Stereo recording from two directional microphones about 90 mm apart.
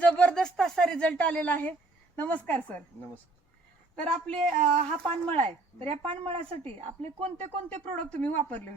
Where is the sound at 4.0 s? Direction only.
10° left (ahead or behind).